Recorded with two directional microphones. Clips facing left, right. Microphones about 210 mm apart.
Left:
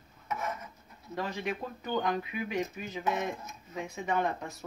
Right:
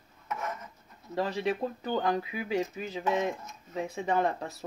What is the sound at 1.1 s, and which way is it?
Speech, 30° right (ahead or behind).